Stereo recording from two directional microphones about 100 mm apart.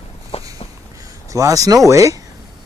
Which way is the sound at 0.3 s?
75° left (ahead or behind).